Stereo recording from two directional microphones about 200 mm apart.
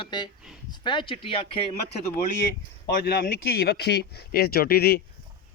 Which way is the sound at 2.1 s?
15° left (ahead or behind).